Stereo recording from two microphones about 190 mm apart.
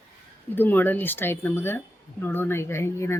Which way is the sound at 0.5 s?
10° left (ahead or behind).